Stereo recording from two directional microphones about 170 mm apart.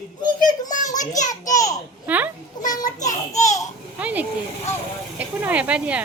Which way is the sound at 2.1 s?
10° right (ahead or behind).